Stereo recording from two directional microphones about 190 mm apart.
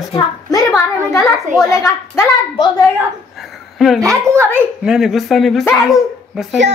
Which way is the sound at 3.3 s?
Centre (ahead or behind).